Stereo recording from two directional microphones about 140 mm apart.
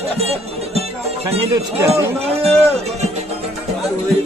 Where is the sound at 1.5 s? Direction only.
20° right (ahead or behind).